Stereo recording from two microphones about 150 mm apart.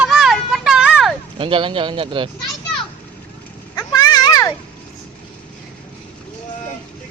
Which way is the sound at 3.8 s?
25° left (ahead or behind).